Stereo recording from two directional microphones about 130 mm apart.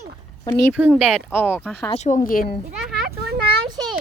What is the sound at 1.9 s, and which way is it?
Speech, 65° left (ahead or behind).